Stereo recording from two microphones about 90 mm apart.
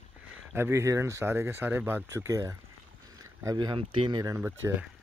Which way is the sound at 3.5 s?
60° right (ahead or behind).